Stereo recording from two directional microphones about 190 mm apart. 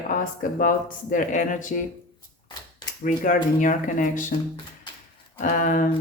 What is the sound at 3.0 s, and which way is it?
Speech, 45° left (ahead or behind).